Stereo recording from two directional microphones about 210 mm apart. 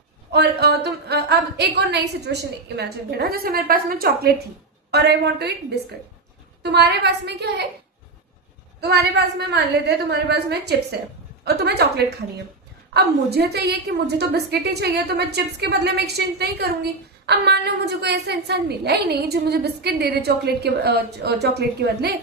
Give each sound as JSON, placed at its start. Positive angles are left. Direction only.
{"t": 0.3, "sound": "a woman's voice", "side_deg": -50}
{"t": 6.6, "sound": "a woman's voice", "side_deg": -50}
{"t": 8.8, "sound": "a woman's voice", "side_deg": -50}